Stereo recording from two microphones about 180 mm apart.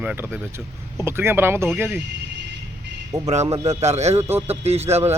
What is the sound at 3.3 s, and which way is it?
A man's voice, 35° right (ahead or behind).